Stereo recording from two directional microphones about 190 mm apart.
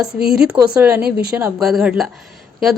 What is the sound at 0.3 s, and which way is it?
A woman's voice, 5° right (ahead or behind).